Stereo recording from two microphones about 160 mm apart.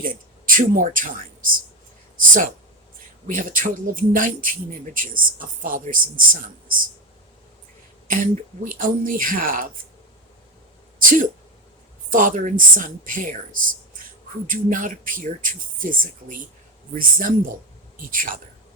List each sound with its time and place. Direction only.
0.0 s speech: 60° right (ahead or behind)
8.0 s speech: 55° right (ahead or behind)
11.0 s speech: 55° right (ahead or behind)